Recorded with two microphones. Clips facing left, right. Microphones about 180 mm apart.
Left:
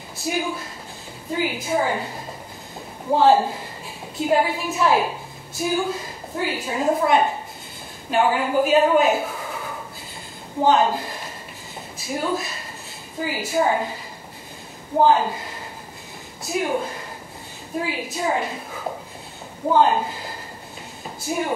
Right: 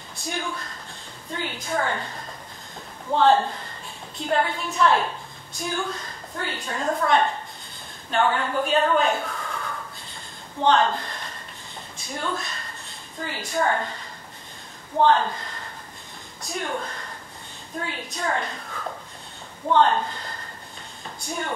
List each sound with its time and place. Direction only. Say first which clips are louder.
0.2 s a woman's voice: left 6 dB; 5° left (ahead or behind)
15.0 s a woman's voice: left 2 dB; 10° left (ahead or behind)
18.7 s a sound: left 4 dB; 20° left (ahead or behind)
19.7 s a woman's voice: left 2 dB; 10° left (ahead or behind)